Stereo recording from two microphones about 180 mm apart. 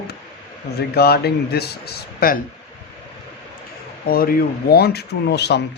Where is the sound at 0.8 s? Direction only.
60° left (ahead or behind).